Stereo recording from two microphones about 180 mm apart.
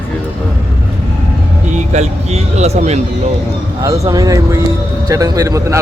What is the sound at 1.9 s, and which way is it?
Speech, 40° right (ahead or behind).